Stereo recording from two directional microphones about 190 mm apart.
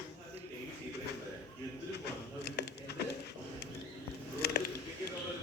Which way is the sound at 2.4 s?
60° left (ahead or behind).